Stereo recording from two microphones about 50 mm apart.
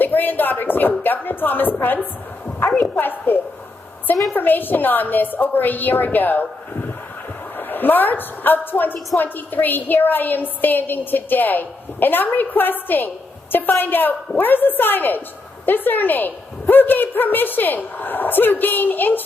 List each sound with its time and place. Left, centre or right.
0.0 s a woman's voice: left
7.5 s a woman's voice: left